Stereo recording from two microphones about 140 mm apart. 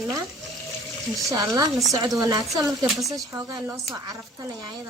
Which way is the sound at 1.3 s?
25° right (ahead or behind).